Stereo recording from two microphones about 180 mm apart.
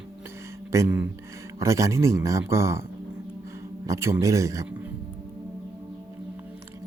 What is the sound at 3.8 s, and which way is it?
Speech, 15° right (ahead or behind).